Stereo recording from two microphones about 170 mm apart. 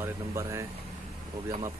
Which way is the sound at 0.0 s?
15° right (ahead or behind).